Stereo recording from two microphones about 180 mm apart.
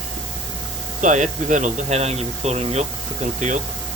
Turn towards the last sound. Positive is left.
turn(degrees=-40)  # may be behind; listen again after turning